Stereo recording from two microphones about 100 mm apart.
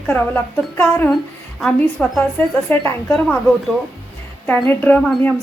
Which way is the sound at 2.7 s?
20° left (ahead or behind).